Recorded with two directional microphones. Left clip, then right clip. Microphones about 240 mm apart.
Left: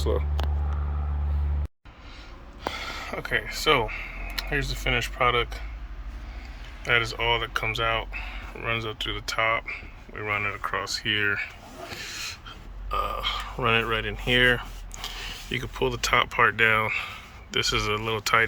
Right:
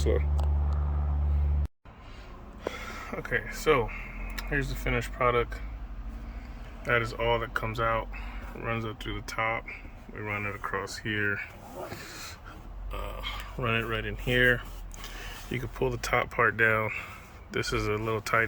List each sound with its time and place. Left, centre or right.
2.7 s speech: centre
6.8 s speech: right
12.9 s speech: centre